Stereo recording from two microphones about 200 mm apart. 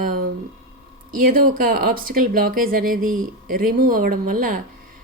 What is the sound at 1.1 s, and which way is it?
Speech, 45° right (ahead or behind).